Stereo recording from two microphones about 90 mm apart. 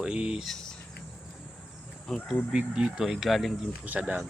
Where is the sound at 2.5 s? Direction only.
5° right (ahead or behind).